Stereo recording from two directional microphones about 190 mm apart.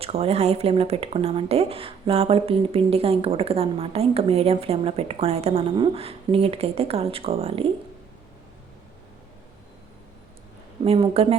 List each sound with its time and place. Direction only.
0.0 s speech: 30° right (ahead or behind)
10.8 s speech: 30° right (ahead or behind)